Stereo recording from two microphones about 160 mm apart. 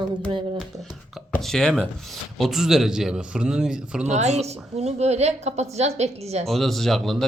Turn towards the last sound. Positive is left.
turn(degrees=0)  # may be behind; listen again after turning